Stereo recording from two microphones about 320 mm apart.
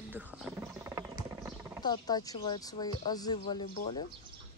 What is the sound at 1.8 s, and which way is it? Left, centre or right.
Speech, centre.